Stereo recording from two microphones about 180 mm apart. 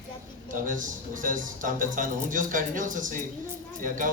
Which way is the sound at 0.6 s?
45° right (ahead or behind).